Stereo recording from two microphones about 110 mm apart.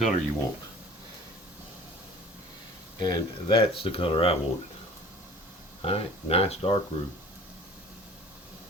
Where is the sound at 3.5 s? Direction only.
55° left (ahead or behind).